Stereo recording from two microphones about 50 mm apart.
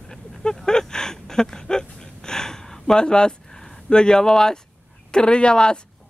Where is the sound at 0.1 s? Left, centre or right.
Centre.